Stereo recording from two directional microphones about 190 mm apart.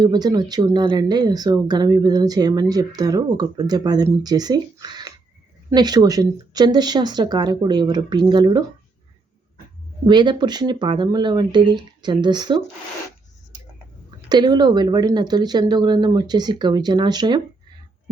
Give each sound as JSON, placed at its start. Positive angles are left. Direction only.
{"t": 0.0, "sound": "speech", "side_deg": -20}
{"t": 10.1, "sound": "speech", "side_deg": -25}
{"t": 14.3, "sound": "speech", "side_deg": -20}